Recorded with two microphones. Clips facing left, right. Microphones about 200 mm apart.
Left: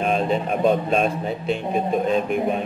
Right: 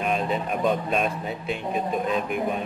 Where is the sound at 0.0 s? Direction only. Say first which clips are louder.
Left 4 dB; 30° left (ahead or behind).